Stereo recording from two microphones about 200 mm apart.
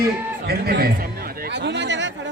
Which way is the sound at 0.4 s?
50° right (ahead or behind).